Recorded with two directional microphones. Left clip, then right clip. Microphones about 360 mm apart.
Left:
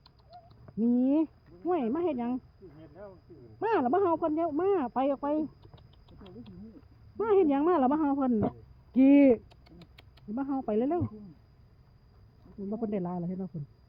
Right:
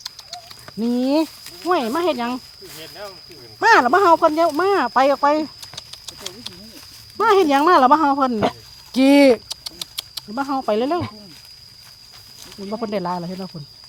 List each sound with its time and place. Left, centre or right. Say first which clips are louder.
0.9 s speech: right 10 dB; centre
3.6 s speech: right 14 dB; centre
7.2 s speech: right 11 dB; centre
12.7 s speech: right 11 dB; centre